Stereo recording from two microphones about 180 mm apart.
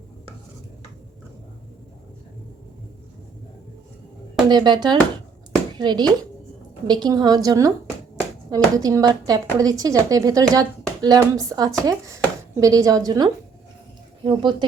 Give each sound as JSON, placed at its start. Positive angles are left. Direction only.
{"t": 4.4, "sound": "a woman's voice", "side_deg": -25}